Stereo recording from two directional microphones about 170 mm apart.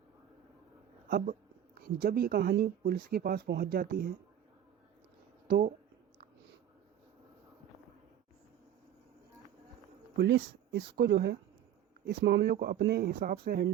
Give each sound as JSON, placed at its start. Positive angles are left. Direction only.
{"t": 1.0, "sound": "a woman's voice", "side_deg": -60}
{"t": 5.5, "sound": "speech", "side_deg": -60}
{"t": 10.2, "sound": "speech", "side_deg": -85}